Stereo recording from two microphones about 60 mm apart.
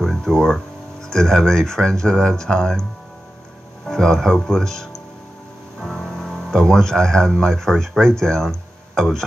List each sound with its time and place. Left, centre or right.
0.0 s a sound: centre
1.1 s speech: centre
3.8 s speech: centre